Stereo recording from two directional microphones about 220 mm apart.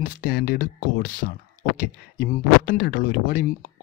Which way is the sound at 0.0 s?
40° left (ahead or behind).